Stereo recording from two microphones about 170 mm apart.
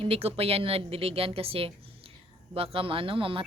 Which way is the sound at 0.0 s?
35° right (ahead or behind).